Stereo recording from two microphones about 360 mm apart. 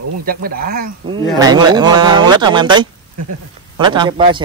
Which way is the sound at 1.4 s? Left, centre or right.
Centre.